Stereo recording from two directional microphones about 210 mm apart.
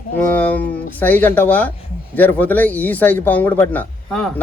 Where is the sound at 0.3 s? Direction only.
10° left (ahead or behind).